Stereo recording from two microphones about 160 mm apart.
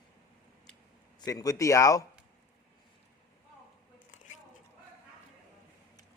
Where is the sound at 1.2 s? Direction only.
20° left (ahead or behind).